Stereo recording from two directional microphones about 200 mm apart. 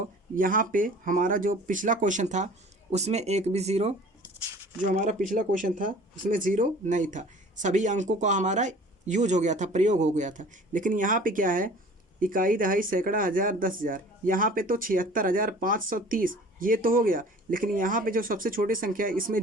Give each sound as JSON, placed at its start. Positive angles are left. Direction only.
{"t": 0.3, "sound": "speech", "side_deg": -45}